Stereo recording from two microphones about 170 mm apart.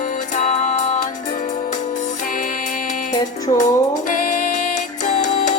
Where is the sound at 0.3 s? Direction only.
45° left (ahead or behind).